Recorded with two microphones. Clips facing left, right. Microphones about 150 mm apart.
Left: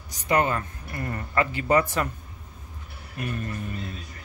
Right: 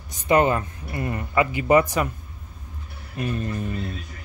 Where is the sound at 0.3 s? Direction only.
20° right (ahead or behind).